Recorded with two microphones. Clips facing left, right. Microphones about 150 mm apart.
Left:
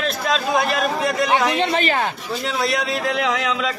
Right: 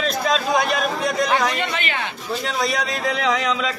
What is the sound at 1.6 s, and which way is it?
Speech, 35° left (ahead or behind).